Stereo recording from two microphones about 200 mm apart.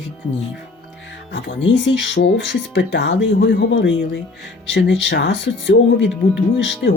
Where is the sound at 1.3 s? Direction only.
60° left (ahead or behind).